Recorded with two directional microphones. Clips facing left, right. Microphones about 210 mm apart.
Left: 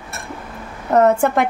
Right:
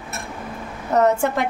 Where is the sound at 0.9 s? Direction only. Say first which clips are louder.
Left 4 dB; 55° left (ahead or behind).